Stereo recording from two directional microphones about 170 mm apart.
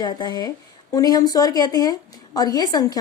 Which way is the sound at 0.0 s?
25° left (ahead or behind).